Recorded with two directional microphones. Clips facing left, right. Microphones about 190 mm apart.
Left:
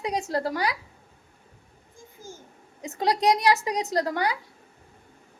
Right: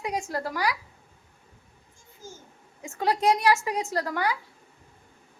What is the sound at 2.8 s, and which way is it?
A woman's voice, 15° left (ahead or behind).